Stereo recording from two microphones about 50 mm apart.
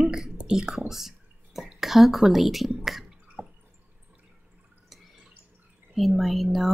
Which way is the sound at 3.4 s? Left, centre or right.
Right.